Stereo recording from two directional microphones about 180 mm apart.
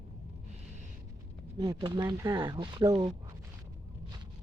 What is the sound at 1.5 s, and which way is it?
Speech, 20° right (ahead or behind).